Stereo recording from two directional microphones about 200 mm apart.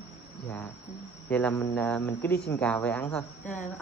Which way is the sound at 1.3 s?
5° left (ahead or behind).